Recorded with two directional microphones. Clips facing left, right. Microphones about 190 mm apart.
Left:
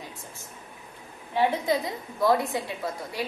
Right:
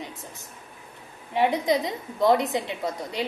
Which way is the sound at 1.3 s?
20° right (ahead or behind).